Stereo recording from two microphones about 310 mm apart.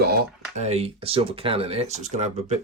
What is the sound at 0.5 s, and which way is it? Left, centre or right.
Speech, right.